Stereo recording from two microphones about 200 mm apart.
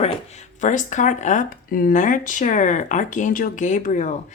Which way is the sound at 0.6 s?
40° left (ahead or behind).